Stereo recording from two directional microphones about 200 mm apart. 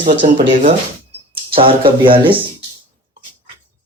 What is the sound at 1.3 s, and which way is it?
Speech, 25° right (ahead or behind).